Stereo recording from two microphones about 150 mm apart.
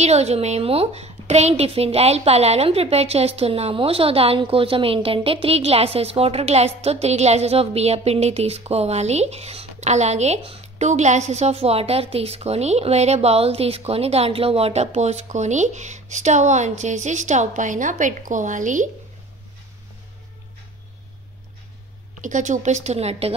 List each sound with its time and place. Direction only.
0.0 s a woman's voice: 45° right (ahead or behind)
22.2 s a woman's voice: 55° right (ahead or behind)